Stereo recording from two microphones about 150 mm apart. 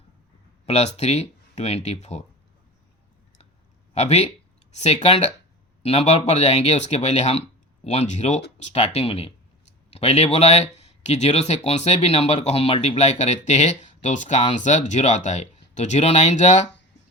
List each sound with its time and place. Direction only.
0.6 s speech: 45° left (ahead or behind)
3.9 s speech: 45° left (ahead or behind)